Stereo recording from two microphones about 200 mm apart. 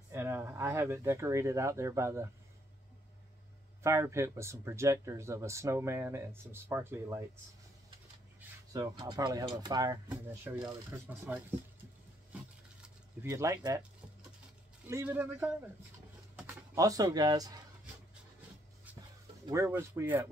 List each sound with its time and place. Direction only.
0.1 s speech: 10° right (ahead or behind)
3.8 s speech: 15° right (ahead or behind)
8.7 s speech: 20° right (ahead or behind)
12.8 s speech: 15° right (ahead or behind)
14.9 s speech: 10° right (ahead or behind)
19.4 s speech: 15° right (ahead or behind)